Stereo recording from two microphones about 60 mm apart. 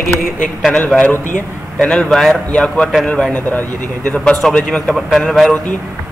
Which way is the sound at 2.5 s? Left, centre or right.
Centre.